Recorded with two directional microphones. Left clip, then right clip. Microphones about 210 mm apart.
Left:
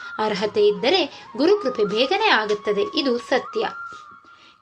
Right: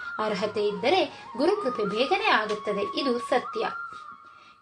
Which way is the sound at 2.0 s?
30° left (ahead or behind).